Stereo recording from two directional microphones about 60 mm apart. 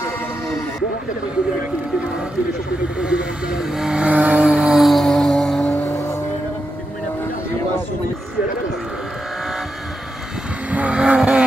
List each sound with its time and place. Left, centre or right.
3.0 s speech: centre
4.1 s vehicle: right
4.4 s music: centre
10.7 s vehicle: right
11.0 s vehicle: centre